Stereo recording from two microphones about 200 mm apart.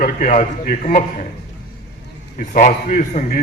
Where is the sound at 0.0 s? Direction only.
40° left (ahead or behind).